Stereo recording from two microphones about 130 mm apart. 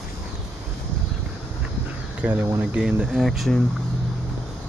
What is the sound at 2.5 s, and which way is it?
Speech, 10° right (ahead or behind).